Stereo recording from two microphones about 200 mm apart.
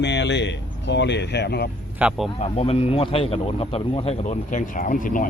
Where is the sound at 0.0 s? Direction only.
60° left (ahead or behind).